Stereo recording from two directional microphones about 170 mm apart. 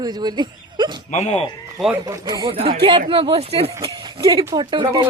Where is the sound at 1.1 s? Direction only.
40° left (ahead or behind).